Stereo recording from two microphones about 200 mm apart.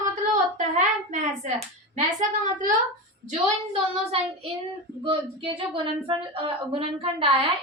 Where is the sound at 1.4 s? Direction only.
35° right (ahead or behind).